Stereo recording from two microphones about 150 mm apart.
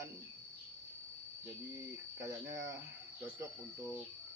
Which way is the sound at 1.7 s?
20° right (ahead or behind).